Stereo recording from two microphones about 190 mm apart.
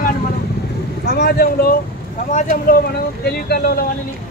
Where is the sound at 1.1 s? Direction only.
55° left (ahead or behind).